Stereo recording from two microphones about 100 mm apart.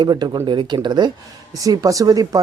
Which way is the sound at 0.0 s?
45° right (ahead or behind).